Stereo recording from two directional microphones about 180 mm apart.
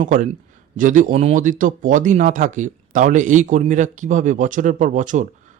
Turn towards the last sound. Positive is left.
turn(degrees=-45)  # may be behind; listen again after turning